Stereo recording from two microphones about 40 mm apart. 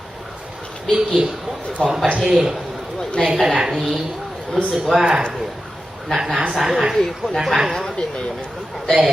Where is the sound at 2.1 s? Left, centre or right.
Right.